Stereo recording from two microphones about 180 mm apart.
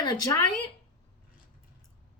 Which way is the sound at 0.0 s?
20° left (ahead or behind).